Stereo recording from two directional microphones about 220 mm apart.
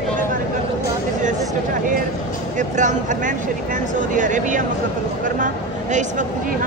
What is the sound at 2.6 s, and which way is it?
Speech, 35° right (ahead or behind).